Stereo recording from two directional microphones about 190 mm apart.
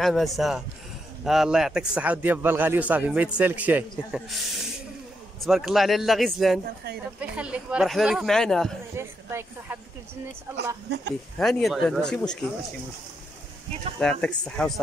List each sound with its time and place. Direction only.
0.0 s a man's voice: centre (ahead or behind)
8.9 s a man's voice: 15° right (ahead or behind)
10.9 s speech: 60° right (ahead or behind)
11.3 s speech: 5° left (ahead or behind)
13.9 s speech: 5° left (ahead or behind)